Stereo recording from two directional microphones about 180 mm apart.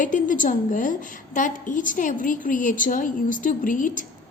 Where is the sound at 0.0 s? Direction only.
45° left (ahead or behind).